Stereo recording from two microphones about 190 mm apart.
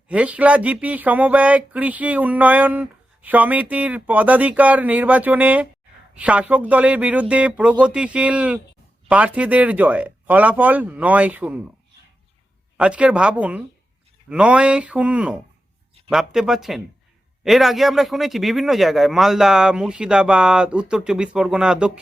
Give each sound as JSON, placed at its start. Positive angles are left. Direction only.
{"t": 0.1, "sound": "speech", "side_deg": -5}
{"t": 12.7, "sound": "a man's voice", "side_deg": -5}